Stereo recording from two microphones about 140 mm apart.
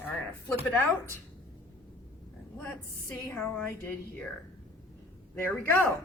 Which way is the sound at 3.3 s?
10° left (ahead or behind).